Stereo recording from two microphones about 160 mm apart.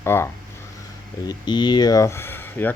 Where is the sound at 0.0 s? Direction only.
15° left (ahead or behind).